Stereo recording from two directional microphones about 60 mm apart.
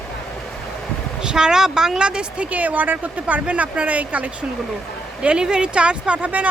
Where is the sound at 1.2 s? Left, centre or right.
Centre.